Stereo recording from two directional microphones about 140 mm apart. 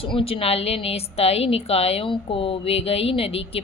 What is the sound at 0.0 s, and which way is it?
A woman's voice, 40° left (ahead or behind).